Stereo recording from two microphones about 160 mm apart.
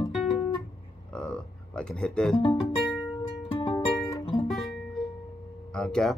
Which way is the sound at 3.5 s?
35° left (ahead or behind).